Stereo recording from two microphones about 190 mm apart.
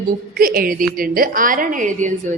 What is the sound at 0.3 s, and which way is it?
A woman's voice, 50° right (ahead or behind).